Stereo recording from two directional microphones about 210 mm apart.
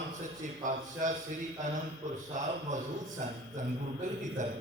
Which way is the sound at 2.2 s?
35° right (ahead or behind).